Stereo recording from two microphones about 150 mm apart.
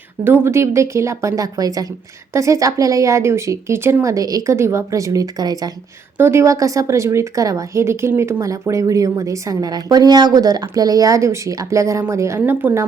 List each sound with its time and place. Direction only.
0.3 s a woman's voice: 15° right (ahead or behind)